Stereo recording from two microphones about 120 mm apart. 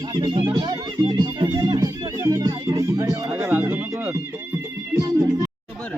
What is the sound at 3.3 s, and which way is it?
Music, 15° right (ahead or behind).